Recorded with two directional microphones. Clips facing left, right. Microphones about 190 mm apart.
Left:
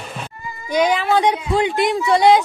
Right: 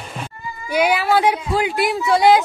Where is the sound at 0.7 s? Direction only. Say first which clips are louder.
Even; 10° right (ahead or behind).